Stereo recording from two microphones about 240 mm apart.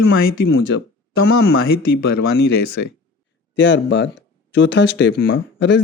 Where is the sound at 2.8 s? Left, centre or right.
Left.